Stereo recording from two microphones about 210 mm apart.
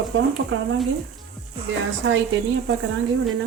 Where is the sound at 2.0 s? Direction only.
75° right (ahead or behind).